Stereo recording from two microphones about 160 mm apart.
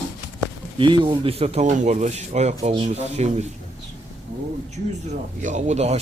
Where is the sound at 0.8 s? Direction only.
30° right (ahead or behind).